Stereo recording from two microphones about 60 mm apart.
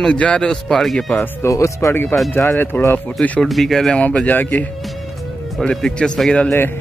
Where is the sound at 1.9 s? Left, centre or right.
Left.